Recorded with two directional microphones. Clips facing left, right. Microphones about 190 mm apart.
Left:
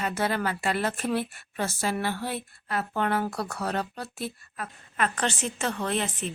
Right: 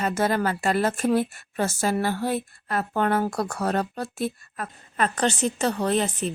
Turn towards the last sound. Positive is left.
turn(degrees=-40)  # may be behind; listen again after turning